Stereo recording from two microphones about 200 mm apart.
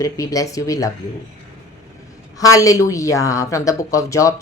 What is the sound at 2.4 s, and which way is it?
A woman's voice, 15° left (ahead or behind).